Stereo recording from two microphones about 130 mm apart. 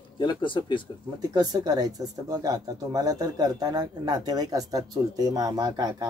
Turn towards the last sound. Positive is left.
turn(degrees=-30)  # may be behind; listen again after turning